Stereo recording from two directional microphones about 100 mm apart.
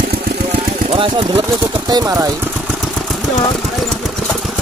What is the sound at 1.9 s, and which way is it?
Speech, 40° right (ahead or behind).